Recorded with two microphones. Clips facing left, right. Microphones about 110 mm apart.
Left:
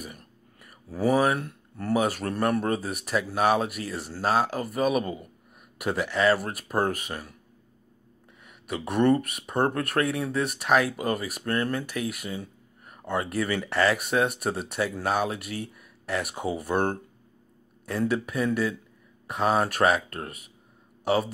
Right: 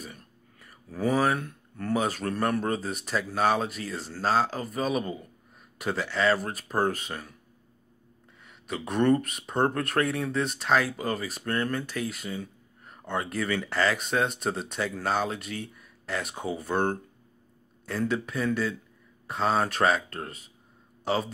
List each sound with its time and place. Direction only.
0.0 s a sound: 10° left (ahead or behind)
0.9 s speech: 5° left (ahead or behind)
8.5 s speech: 5° left (ahead or behind)